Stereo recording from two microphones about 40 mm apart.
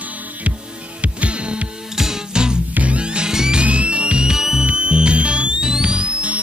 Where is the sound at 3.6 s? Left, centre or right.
Right; by 4.6 s centre.